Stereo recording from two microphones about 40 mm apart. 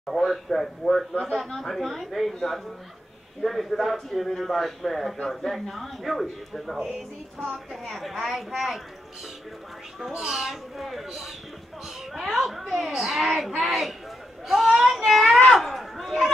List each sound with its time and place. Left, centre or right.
0.0 s speech: centre
3.4 s speech: centre
10.1 s speech: centre
12.1 s speech: centre